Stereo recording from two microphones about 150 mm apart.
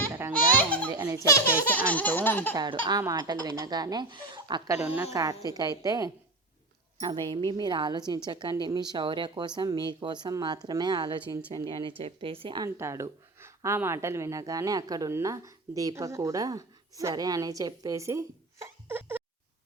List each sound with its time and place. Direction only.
0.1 s baby laughter: 15° right (ahead or behind)
0.6 s baby laughter: 10° left (ahead or behind)
0.9 s baby laughter: 25° right (ahead or behind)
1.7 s baby laughter: 10° left (ahead or behind)
2.6 s a woman's voice: 30° right (ahead or behind)
12.6 s speech: 20° right (ahead or behind)